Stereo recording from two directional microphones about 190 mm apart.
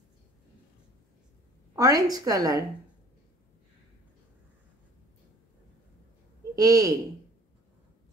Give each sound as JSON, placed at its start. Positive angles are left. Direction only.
{"t": 1.8, "sound": "a woman's voice", "side_deg": -20}
{"t": 6.5, "sound": "speech", "side_deg": -20}